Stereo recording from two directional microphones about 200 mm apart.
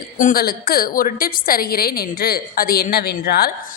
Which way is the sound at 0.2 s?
45° left (ahead or behind).